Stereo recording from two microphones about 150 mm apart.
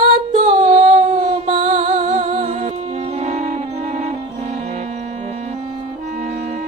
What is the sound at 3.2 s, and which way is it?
Music, 50° right (ahead or behind).